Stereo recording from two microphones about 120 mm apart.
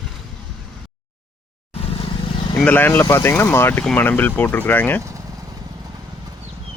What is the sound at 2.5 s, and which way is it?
Speech, 15° left (ahead or behind).